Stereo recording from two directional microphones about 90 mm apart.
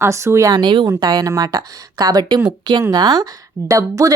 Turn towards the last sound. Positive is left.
turn(degrees=-40)  # may be behind; listen again after turning